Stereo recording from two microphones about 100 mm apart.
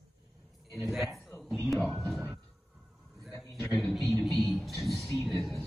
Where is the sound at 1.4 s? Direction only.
Centre (ahead or behind).